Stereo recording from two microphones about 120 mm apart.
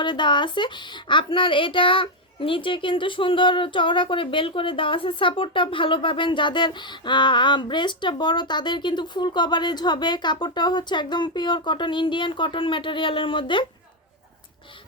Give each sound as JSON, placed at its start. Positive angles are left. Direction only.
{"t": 0.0, "sound": "a woman's voice", "side_deg": 40}